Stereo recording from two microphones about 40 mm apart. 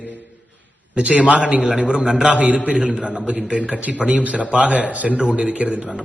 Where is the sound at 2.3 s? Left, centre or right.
Right.